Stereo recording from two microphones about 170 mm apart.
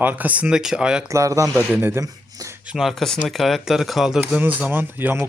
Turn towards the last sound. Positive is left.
turn(degrees=-15)  # may be behind; listen again after turning